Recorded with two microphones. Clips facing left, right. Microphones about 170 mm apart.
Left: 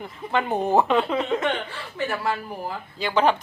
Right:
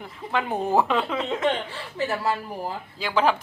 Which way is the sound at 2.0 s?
30° right (ahead or behind).